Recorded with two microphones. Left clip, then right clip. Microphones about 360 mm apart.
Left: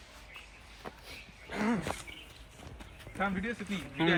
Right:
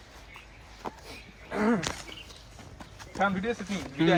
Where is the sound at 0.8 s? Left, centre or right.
Centre.